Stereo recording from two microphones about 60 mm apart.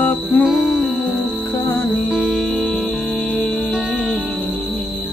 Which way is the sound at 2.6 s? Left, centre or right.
Centre.